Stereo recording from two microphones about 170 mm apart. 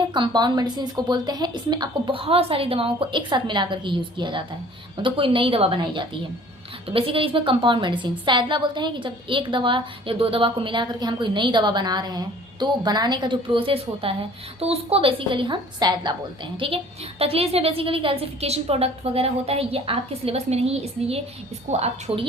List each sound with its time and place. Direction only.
0.1 s a woman's voice: 25° right (ahead or behind)